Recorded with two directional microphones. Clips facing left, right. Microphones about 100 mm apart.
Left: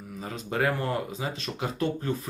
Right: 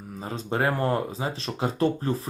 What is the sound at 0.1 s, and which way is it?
Speech, 35° right (ahead or behind).